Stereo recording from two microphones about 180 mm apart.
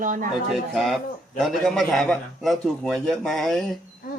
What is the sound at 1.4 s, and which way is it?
A man's voice, centre (ahead or behind).